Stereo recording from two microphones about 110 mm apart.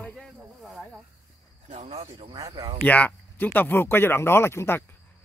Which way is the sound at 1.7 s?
70° right (ahead or behind).